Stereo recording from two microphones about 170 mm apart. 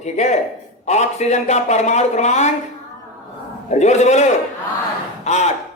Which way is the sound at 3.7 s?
40° left (ahead or behind).